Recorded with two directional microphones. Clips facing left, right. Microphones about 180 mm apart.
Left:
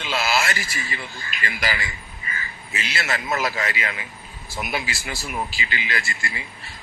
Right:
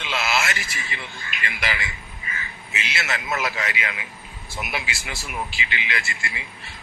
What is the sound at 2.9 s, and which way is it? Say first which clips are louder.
A man's voice: left 2 dB; 30° left (ahead or behind).